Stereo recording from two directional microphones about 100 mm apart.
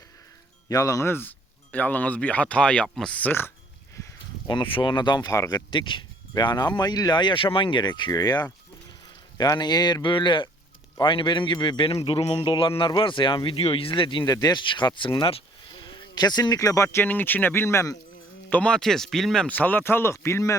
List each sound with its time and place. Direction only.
0.7 s speech: 35° left (ahead or behind); by 3.5 s 20° left (ahead or behind)
4.4 s speech: 55° left (ahead or behind); by 5.6 s 40° left (ahead or behind)
5.7 s speech: 55° left (ahead or behind)
11.9 s speech: 75° left (ahead or behind)
15.7 s a sound: 50° left (ahead or behind)
16.6 s speech: 30° left (ahead or behind)
18.5 s speech: 10° left (ahead or behind); by 20.6 s 30° left (ahead or behind)